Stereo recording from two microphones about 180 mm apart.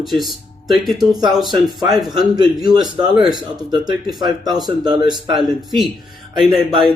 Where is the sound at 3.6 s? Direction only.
25° right (ahead or behind).